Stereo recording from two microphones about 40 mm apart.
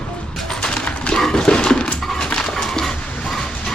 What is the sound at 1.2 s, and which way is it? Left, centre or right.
Dog, centre.